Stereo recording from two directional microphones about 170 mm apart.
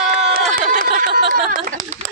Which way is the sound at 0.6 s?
55° right (ahead or behind).